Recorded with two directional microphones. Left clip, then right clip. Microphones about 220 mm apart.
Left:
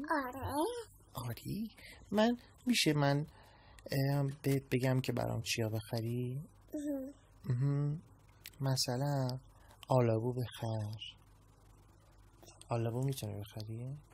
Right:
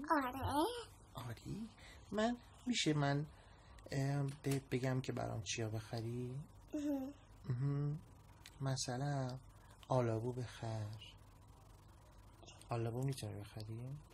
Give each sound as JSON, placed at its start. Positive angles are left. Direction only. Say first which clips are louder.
{"t": 0.0, "sound": "speech", "louder": "left 1 dB", "side_deg": -5}
{"t": 1.1, "sound": "a sound", "louder": "left 6 dB", "side_deg": 40}
{"t": 2.1, "sound": "speech", "louder": "left 7 dB", "side_deg": 40}
{"t": 7.4, "sound": "speech", "louder": "left 5 dB", "side_deg": 35}
{"t": 12.6, "sound": "speech", "louder": "left 5 dB", "side_deg": 35}